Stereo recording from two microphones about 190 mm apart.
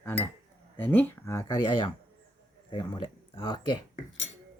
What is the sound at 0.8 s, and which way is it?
Speech, 10° left (ahead or behind).